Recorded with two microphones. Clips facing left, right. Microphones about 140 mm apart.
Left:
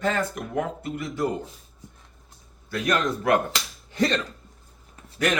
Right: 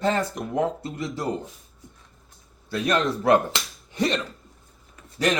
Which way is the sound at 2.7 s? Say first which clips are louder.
Right 1 dB; 30° right (ahead or behind).